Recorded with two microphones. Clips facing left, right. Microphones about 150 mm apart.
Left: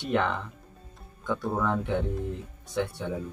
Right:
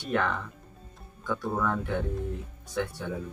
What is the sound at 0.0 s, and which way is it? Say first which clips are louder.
Speech: left 2 dB; 20° left (ahead or behind).